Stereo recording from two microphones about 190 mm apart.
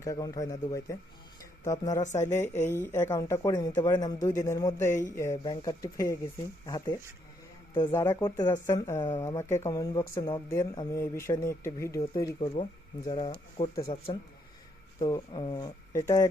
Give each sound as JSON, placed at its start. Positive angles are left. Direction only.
{"t": 0.0, "sound": "a man's voice", "side_deg": 20}